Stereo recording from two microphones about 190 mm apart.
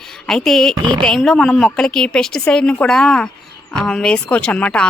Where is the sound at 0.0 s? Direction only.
Centre (ahead or behind).